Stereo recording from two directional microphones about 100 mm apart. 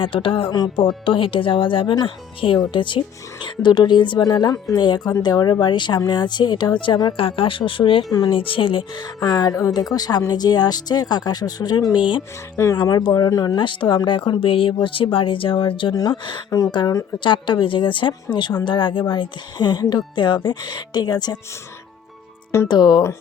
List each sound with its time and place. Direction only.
0.0 s speech: 60° left (ahead or behind)
9.2 s speech: 40° left (ahead or behind)
13.6 s speech: 55° left (ahead or behind)
14.4 s speech: 65° left (ahead or behind)
16.0 s speech: 40° left (ahead or behind)
17.2 s speech: 55° left (ahead or behind)
22.7 s speech: 45° left (ahead or behind)